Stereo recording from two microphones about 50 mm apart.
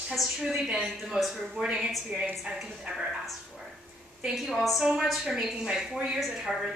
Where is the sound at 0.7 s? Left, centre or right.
Centre.